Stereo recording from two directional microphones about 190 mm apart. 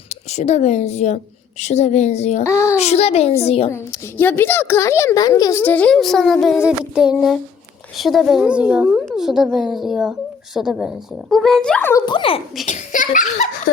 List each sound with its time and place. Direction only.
0.1 s a woman's voice: 35° left (ahead or behind)
2.4 s a child's voice: 15° left (ahead or behind)
2.7 s a child's voice: 35° left (ahead or behind)
3.7 s a child's voice: 15° left (ahead or behind)
12.0 s speech: 25° left (ahead or behind)
12.6 s a child's voice: 40° left (ahead or behind)